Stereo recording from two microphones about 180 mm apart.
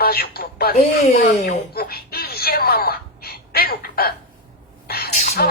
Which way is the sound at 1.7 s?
60° left (ahead or behind).